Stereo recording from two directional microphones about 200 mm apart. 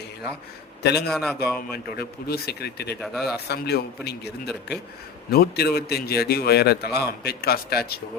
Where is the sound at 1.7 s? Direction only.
50° left (ahead or behind).